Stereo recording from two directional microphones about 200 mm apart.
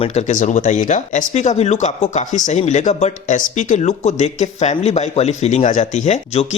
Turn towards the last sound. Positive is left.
turn(degrees=30)  # may be behind; listen again after turning